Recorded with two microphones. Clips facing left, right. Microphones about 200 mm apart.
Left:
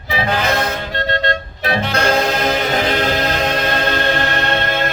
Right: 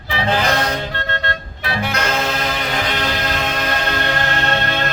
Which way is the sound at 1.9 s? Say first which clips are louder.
Left 6 dB; 30° left (ahead or behind).